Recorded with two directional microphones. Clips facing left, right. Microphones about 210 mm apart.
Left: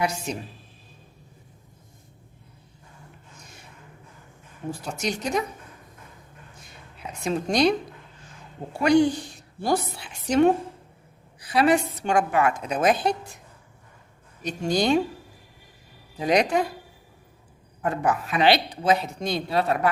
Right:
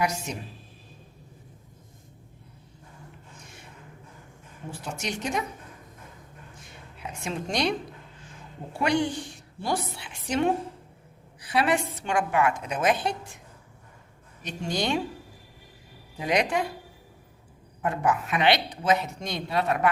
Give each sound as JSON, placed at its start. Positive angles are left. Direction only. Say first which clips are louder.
{"t": 0.0, "sound": "a woman's voice", "louder": "left 1 dB", "side_deg": 30}
{"t": 4.7, "sound": "a woman's voice", "louder": "left 4 dB", "side_deg": 35}
{"t": 7.3, "sound": "a woman's voice", "louder": "left 6 dB", "side_deg": 40}
{"t": 8.8, "sound": "a woman's voice", "louder": "left 6 dB", "side_deg": 40}
{"t": 14.4, "sound": "a woman's voice", "louder": "left 6 dB", "side_deg": 40}
{"t": 16.2, "sound": "a woman's voice", "louder": "left 4 dB", "side_deg": 40}
{"t": 18.0, "sound": "a woman's voice", "louder": "left 2 dB", "side_deg": 35}